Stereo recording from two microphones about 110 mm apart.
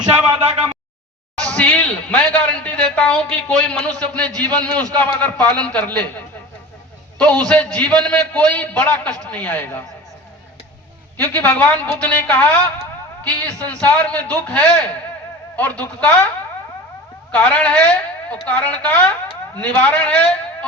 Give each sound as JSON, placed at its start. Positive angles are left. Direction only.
{"t": 0.4, "sound": "a sound", "side_deg": -65}
{"t": 1.4, "sound": "a man's voice", "side_deg": 10}
{"t": 11.2, "sound": "a man's voice", "side_deg": 15}
{"t": 17.3, "sound": "a man's voice", "side_deg": 10}